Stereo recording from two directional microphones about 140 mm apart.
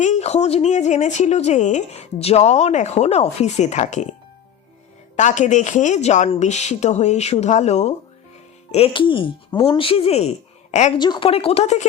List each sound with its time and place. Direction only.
0.0 s speech: 55° left (ahead or behind)
5.1 s speech: 60° left (ahead or behind)
8.7 s speech: 40° left (ahead or behind)
10.9 s speech: 30° left (ahead or behind)
11.3 s speech: 45° left (ahead or behind)